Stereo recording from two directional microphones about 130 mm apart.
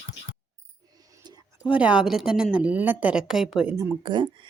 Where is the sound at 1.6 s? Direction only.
10° right (ahead or behind).